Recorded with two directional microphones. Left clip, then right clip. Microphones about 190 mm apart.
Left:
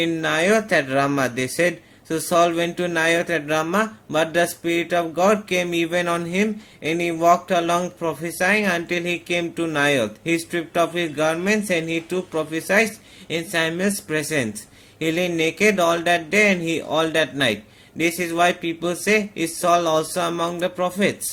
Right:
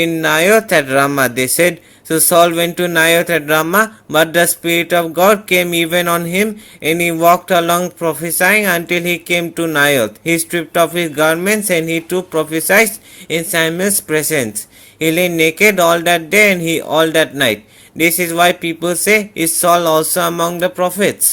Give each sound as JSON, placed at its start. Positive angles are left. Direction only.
{"t": 0.0, "sound": "speech", "side_deg": -35}